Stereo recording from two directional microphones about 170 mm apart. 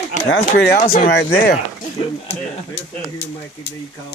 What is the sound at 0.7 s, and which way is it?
Speech, 60° left (ahead or behind).